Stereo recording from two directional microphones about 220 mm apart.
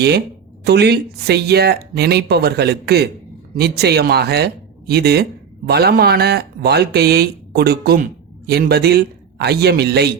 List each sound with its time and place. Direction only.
0.6 s speech: 50° right (ahead or behind)